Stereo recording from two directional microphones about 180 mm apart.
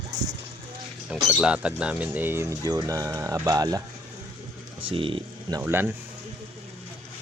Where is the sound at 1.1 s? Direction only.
5° right (ahead or behind); by 3.8 s 20° right (ahead or behind).